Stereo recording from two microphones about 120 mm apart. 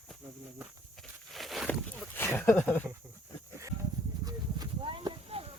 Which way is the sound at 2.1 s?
15° left (ahead or behind).